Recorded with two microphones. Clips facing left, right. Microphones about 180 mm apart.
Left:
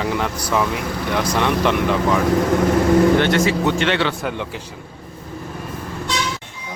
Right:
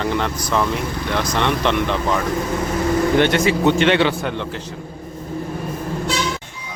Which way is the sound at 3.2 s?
20° right (ahead or behind).